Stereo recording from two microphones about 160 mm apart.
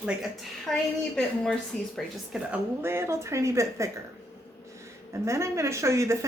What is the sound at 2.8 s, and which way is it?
Speech, 15° right (ahead or behind).